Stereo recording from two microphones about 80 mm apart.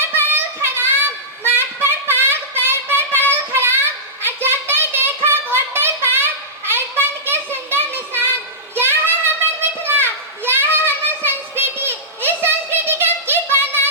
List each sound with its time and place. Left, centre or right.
0.0 s child singing: right
1.5 s a sound: right
3.5 s child singing: right
4.3 s a sound: right
9.9 s children playing: right
10.4 s child singing: right